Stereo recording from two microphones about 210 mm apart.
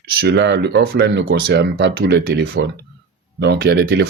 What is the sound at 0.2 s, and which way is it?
Speech, 55° right (ahead or behind).